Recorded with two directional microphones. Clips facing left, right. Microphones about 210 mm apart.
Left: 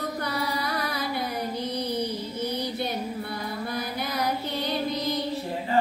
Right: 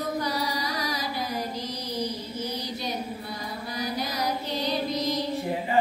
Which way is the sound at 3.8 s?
60° left (ahead or behind).